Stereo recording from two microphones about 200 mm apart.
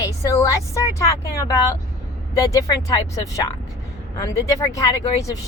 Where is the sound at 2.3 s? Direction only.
15° left (ahead or behind).